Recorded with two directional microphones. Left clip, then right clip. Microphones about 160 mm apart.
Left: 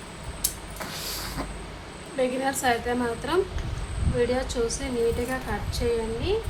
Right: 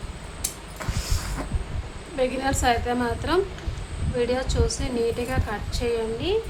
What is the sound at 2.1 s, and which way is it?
A woman's voice, 25° right (ahead or behind).